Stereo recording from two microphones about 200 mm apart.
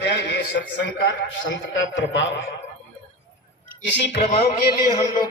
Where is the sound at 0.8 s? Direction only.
55° left (ahead or behind).